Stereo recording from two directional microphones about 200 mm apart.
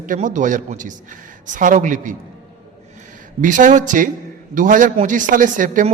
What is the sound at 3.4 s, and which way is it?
A man's voice, 40° right (ahead or behind).